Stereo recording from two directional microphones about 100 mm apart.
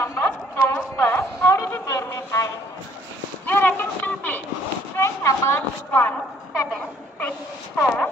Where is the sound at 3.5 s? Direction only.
20° left (ahead or behind).